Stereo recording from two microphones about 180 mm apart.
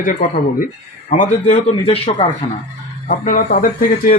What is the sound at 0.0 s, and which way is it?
A man's voice, 50° left (ahead or behind).